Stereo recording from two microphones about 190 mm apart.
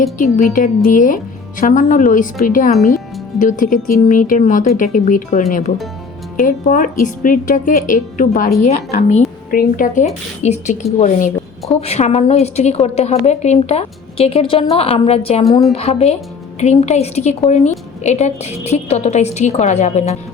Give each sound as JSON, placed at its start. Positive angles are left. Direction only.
{"t": 0.9, "sound": "a woman's voice", "side_deg": 45}